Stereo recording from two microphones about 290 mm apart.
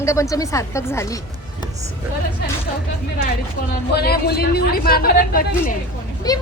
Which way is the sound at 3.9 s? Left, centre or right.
Left.